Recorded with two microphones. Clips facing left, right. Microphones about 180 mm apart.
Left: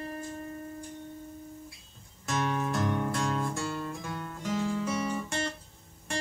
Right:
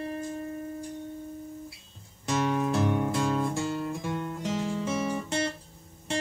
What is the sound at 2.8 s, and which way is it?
Music, 10° right (ahead or behind).